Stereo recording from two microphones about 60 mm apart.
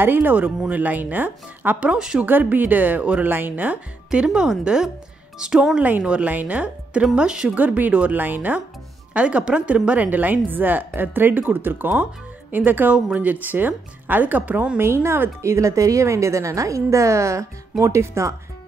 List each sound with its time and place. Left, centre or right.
0.0 s speech: right
2.0 s speech: centre
2.2 s speech: right
4.1 s speech: centre
5.8 s speech: right
7.5 s speech: right
14.8 s speech: right
15.4 s a woman's voice: right